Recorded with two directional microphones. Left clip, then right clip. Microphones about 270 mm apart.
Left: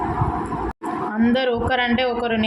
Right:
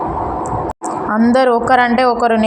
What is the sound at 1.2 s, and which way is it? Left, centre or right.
A man's voice, centre.